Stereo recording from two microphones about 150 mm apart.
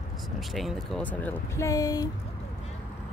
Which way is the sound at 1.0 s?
10° left (ahead or behind).